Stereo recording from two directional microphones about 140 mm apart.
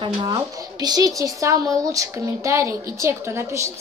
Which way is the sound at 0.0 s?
30° right (ahead or behind).